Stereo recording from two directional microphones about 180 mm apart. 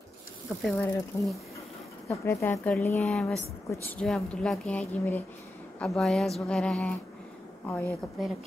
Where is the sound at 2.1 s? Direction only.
15° left (ahead or behind).